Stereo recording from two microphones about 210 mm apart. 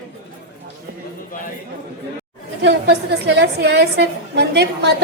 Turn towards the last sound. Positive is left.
turn(degrees=-55)  # may be behind; listen again after turning